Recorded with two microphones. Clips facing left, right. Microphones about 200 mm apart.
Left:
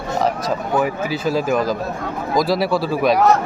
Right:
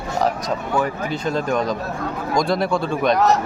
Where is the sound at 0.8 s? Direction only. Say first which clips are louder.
Left 3 dB; 5° left (ahead or behind).